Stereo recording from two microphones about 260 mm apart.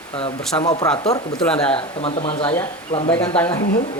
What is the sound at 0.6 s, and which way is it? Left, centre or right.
Speech, centre.